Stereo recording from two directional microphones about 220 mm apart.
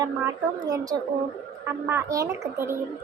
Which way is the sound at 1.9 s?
15° right (ahead or behind).